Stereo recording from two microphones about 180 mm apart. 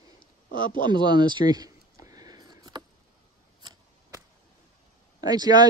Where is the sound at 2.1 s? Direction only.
20° right (ahead or behind).